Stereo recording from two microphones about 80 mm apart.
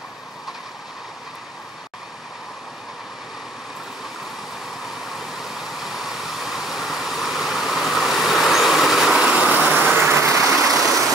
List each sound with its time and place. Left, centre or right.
4.8 s vehicle: centre
9.9 s vehicle: right
10.4 s vehicle: centre